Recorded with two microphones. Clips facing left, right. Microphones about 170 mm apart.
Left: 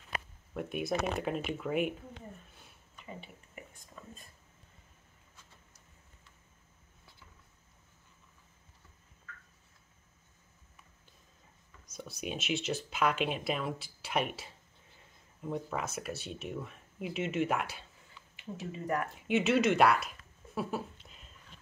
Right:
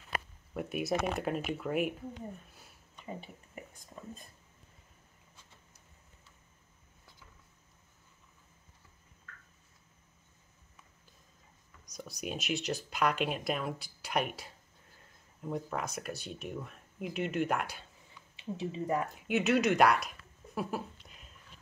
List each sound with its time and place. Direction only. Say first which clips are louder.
0.6 s speech: right 1 dB; 5° right (ahead or behind)
3.1 s whispering: right 4 dB; 35° right (ahead or behind)
11.8 s speech: even; 5° left (ahead or behind)
18.4 s speech: right 4 dB; 20° right (ahead or behind)
19.1 s a sound: left 2 dB; centre (ahead or behind)